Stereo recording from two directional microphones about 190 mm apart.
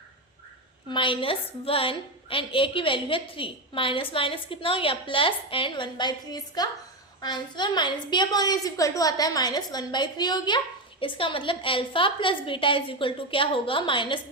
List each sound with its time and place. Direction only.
0.9 s a woman's voice: 25° left (ahead or behind)